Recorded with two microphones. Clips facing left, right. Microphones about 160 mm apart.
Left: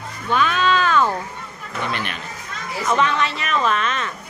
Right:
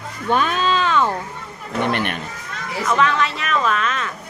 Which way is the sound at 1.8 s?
60° right (ahead or behind).